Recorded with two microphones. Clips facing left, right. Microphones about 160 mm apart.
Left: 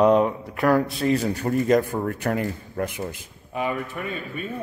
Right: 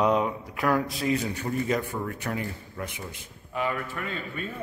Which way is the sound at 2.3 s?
55° left (ahead or behind).